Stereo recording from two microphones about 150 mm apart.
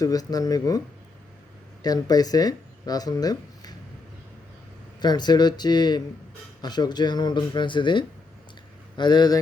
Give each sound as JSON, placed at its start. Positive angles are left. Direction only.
{"t": 0.0, "sound": "speech", "side_deg": 25}
{"t": 1.8, "sound": "speech", "side_deg": 25}
{"t": 4.9, "sound": "speech", "side_deg": 30}